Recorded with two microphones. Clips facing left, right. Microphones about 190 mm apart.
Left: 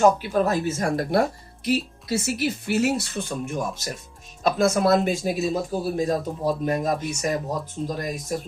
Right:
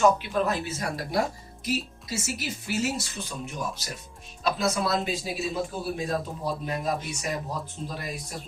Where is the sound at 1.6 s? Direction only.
60° left (ahead or behind).